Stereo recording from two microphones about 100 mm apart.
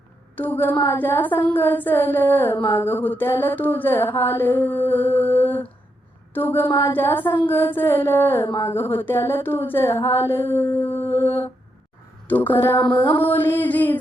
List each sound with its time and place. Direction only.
0.3 s mantra: 15° left (ahead or behind)
0.8 s a sound: 20° left (ahead or behind)
12.9 s mantra: 20° left (ahead or behind)